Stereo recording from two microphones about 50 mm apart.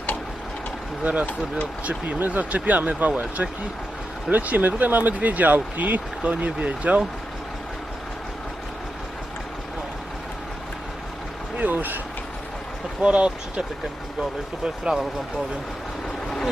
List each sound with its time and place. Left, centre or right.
1.0 s speech: right
11.6 s speech: right
13.0 s speech: right